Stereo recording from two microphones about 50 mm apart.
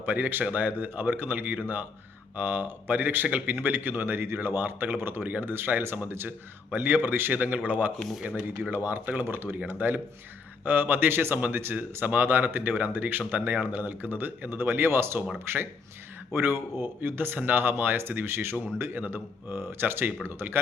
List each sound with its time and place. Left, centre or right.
0.0 s speech: right
7.3 s speech: right
8.7 s speech: right
9.2 s speech: right
18.9 s speech: right